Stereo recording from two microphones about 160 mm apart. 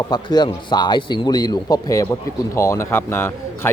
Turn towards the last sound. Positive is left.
turn(degrees=15)  # may be behind; listen again after turning